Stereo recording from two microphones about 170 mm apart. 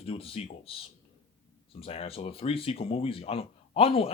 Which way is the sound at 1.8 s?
35° left (ahead or behind).